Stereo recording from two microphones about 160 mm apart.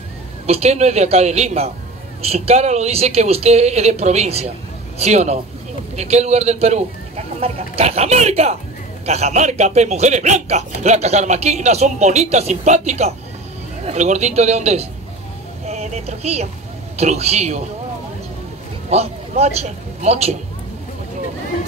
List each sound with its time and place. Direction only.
0.5 s speech: 40° right (ahead or behind)
18.9 s a man's voice: 40° right (ahead or behind)